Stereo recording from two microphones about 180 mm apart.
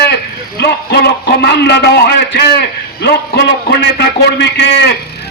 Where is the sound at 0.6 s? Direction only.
65° left (ahead or behind).